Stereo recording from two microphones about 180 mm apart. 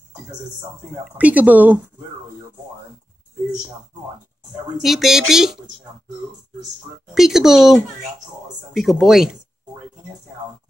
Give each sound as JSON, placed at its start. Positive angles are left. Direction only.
{"t": 1.1, "sound": "speech", "side_deg": -10}
{"t": 4.7, "sound": "speech", "side_deg": 0}
{"t": 7.2, "sound": "speech", "side_deg": 0}